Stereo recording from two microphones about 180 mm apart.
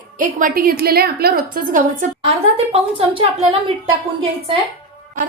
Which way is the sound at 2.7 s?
30° right (ahead or behind).